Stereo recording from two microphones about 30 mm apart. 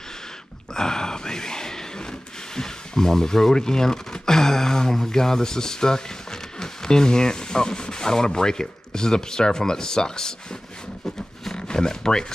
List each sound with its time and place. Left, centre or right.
0.7 s gasp: left
11.5 s speech: left